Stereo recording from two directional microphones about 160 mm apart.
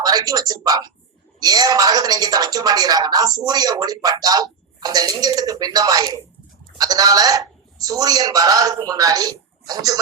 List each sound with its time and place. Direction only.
0.0 s speech: 25° right (ahead or behind)